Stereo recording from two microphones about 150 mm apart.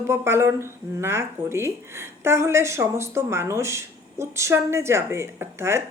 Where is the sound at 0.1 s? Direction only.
15° right (ahead or behind).